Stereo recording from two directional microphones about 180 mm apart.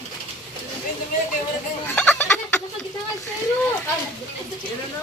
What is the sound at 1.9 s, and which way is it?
Fowl, 10° left (ahead or behind).